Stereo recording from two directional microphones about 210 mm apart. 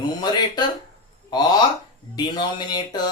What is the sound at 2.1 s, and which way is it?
Speech, 20° left (ahead or behind).